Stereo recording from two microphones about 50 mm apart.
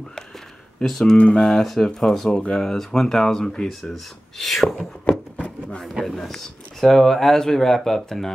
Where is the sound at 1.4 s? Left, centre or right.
Centre.